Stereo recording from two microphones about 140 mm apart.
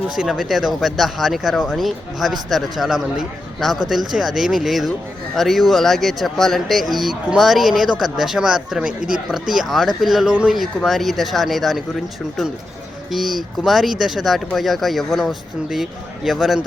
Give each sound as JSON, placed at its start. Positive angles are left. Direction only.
{"t": 0.2, "sound": "speech", "side_deg": 0}
{"t": 8.9, "sound": "speech", "side_deg": -80}
{"t": 9.3, "sound": "speech", "side_deg": -5}
{"t": 13.1, "sound": "speech", "side_deg": 0}